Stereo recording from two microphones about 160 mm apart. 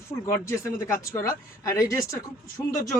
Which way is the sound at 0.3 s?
15° left (ahead or behind).